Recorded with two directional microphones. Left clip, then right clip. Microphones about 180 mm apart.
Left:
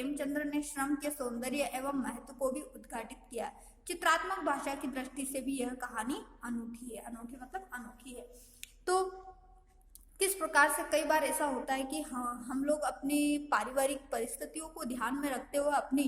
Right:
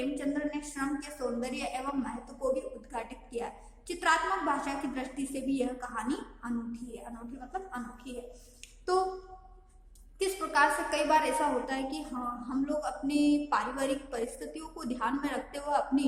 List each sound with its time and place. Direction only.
0.1 s a woman's voice: 45° left (ahead or behind)
10.2 s a woman's voice: 45° left (ahead or behind)